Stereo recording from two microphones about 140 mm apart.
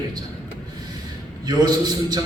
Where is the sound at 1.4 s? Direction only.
30° right (ahead or behind).